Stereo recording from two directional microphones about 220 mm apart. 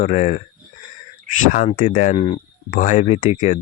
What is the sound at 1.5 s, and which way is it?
Speech, 35° left (ahead or behind).